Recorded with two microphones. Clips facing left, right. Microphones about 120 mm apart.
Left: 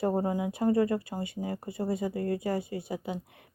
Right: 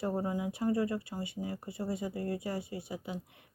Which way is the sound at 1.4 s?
50° left (ahead or behind).